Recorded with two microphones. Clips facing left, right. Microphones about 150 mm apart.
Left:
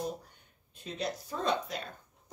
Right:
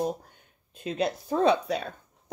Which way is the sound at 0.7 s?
80° right.